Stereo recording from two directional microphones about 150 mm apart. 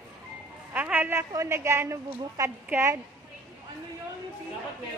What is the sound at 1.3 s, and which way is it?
A woman's voice, 20° right (ahead or behind).